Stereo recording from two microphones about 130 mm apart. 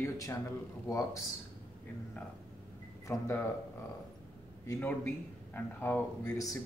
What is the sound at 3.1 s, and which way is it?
Speech, 20° left (ahead or behind).